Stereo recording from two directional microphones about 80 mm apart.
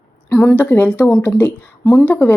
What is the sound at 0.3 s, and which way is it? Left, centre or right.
A woman's voice, left.